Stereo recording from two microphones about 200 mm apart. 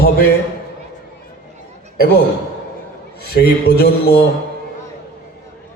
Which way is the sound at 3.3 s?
55° left (ahead or behind).